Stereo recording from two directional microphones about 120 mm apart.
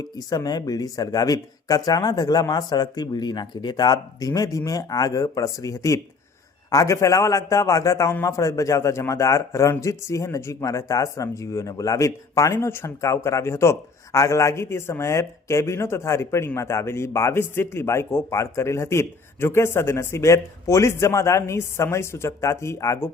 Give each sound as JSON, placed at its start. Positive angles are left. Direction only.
{"t": 0.3, "sound": "a man's voice", "side_deg": 35}